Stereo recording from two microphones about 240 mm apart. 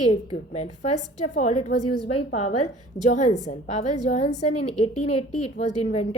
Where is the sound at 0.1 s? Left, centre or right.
Left.